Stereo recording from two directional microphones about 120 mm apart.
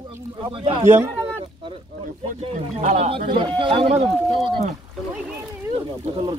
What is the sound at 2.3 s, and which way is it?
Speech, 90° right.